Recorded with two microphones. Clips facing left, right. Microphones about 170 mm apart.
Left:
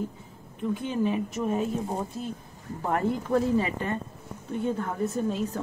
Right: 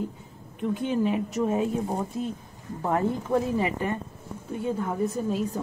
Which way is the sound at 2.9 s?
15° right (ahead or behind).